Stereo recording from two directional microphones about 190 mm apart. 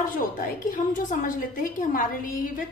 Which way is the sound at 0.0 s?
45° left (ahead or behind).